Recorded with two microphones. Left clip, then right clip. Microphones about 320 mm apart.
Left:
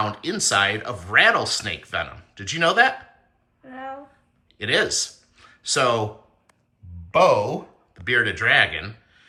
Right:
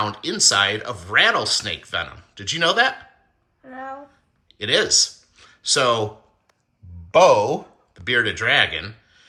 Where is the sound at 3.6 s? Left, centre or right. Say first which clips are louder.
Right 1 dB; centre.